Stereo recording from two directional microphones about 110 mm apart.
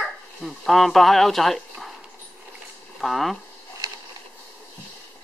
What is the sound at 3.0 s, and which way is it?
Speech, centre (ahead or behind).